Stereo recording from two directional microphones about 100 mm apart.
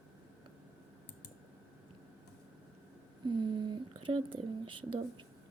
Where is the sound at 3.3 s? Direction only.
50° right (ahead or behind).